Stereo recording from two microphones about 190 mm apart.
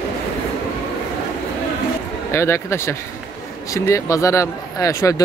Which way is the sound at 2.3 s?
15° left (ahead or behind).